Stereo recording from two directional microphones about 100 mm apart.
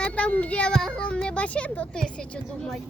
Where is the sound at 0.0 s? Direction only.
15° left (ahead or behind).